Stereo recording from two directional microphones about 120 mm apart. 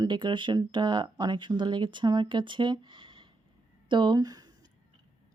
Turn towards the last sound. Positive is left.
turn(degrees=-30)  # may be behind; listen again after turning